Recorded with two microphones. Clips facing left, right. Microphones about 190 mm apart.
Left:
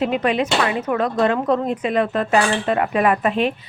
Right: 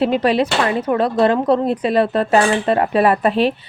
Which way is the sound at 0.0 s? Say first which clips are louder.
Right 4 dB; 35° right (ahead or behind).